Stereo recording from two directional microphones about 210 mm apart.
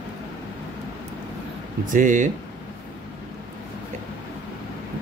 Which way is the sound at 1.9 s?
40° right (ahead or behind).